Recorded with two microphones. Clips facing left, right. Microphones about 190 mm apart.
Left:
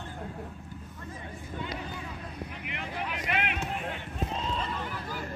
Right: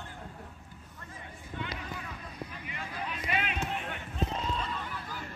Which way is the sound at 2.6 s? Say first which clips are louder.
Left 4 dB; 70° left (ahead or behind).